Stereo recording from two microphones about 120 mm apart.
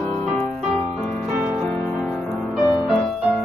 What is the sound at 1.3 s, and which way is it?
Music, 10° right (ahead or behind).